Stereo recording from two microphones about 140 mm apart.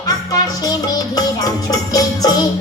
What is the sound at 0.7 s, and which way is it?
Music, 25° left (ahead or behind).